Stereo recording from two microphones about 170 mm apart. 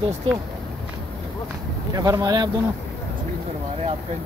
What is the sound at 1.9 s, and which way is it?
Speech, 20° right (ahead or behind).